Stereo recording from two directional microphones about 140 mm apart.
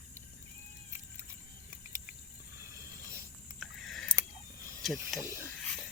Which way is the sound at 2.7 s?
20° right (ahead or behind).